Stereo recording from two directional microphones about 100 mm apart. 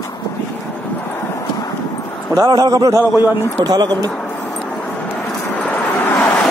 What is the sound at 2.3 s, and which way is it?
A man's voice, 40° right (ahead or behind).